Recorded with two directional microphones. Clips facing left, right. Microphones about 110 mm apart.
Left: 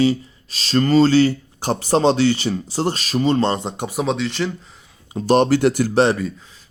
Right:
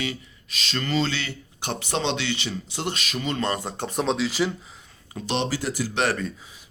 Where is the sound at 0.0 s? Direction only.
35° left (ahead or behind).